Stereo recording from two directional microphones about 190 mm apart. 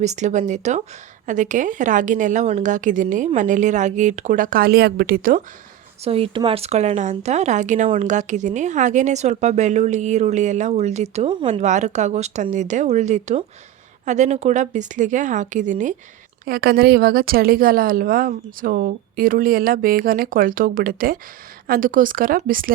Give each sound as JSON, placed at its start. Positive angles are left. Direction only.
{"t": 0.0, "sound": "speech", "side_deg": -35}
{"t": 6.1, "sound": "speech", "side_deg": -30}
{"t": 16.5, "sound": "a woman's voice", "side_deg": -50}